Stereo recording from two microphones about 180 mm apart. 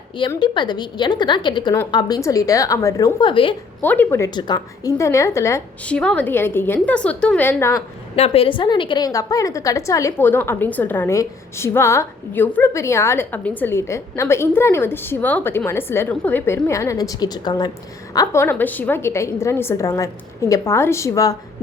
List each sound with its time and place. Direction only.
0.3 s a woman's voice: 25° left (ahead or behind)
3.8 s a woman's voice: 10° left (ahead or behind)
4.4 s a woman's voice: 25° left (ahead or behind)
8.1 s a woman's voice: 35° left (ahead or behind); by 21.3 s 15° left (ahead or behind)